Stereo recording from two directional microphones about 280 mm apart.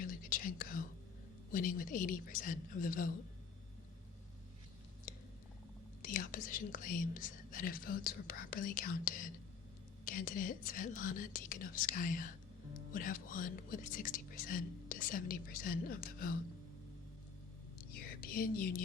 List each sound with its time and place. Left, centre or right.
0.0 s whispering: left
1.5 s speech: left
5.1 s a sound: left
6.0 s speech: left
17.9 s speech: left